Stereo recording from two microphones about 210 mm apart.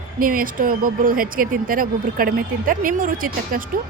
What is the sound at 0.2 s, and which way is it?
Speech, 40° right (ahead or behind).